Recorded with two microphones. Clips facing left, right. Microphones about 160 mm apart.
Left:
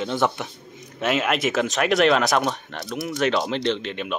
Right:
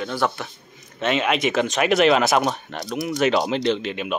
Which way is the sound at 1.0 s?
5° left (ahead or behind).